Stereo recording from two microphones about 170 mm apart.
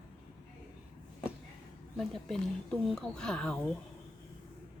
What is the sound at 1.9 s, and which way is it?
Speech, 5° left (ahead or behind).